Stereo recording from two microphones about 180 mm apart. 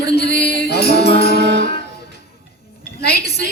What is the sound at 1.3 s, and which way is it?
Music, 75° right (ahead or behind).